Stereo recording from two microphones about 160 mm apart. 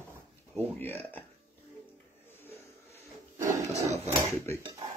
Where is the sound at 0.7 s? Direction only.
10° left (ahead or behind).